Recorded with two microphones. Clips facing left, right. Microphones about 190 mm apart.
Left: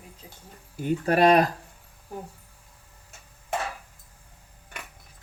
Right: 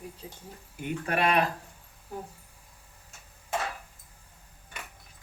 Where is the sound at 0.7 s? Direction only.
35° left (ahead or behind).